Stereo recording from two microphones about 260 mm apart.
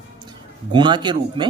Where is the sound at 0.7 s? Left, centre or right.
Centre.